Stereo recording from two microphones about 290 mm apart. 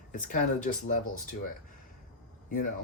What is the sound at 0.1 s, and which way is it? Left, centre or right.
Speech, left.